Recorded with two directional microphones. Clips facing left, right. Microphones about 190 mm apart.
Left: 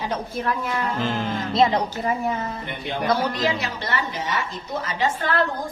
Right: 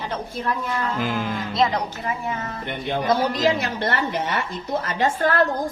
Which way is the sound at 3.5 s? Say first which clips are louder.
Right 3 dB; 50° right (ahead or behind).